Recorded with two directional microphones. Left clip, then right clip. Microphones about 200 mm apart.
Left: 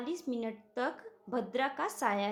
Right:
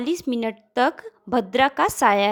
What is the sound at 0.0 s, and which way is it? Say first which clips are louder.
A woman's voice: right 12 dB; 50° right (ahead or behind).